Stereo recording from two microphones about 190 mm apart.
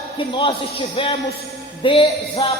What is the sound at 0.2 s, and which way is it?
A man's voice, 25° left (ahead or behind).